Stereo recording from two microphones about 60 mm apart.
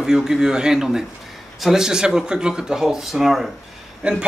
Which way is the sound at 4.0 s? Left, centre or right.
Centre.